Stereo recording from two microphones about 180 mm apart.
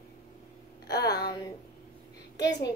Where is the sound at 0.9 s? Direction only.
20° left (ahead or behind).